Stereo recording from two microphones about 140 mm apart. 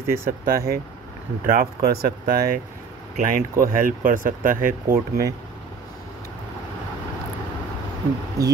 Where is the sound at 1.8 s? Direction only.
90° right.